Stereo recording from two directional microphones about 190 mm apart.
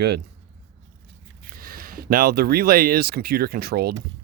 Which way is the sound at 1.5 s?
50° right (ahead or behind).